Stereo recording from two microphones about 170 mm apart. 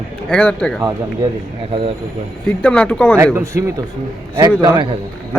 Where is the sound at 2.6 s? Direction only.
5° left (ahead or behind).